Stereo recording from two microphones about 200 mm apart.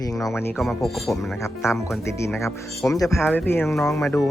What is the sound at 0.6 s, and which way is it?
Speech, centre (ahead or behind).